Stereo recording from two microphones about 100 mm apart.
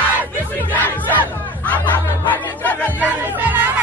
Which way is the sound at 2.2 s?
15° left (ahead or behind).